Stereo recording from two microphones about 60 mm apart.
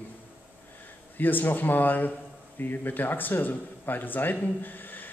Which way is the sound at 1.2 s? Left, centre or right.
Left.